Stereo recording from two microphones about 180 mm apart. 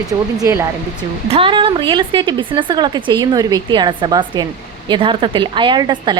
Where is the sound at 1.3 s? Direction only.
30° right (ahead or behind).